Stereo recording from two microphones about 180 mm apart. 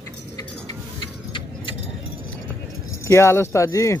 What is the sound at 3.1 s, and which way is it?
Speech, 15° left (ahead or behind).